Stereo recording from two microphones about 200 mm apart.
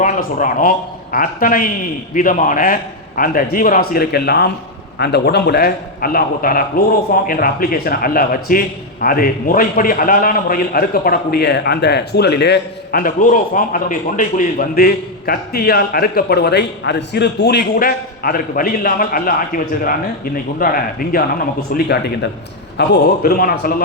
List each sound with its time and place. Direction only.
0.0 s a man's voice: 40° left (ahead or behind)